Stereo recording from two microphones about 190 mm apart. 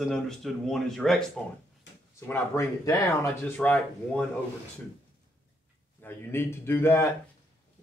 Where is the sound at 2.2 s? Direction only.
15° left (ahead or behind).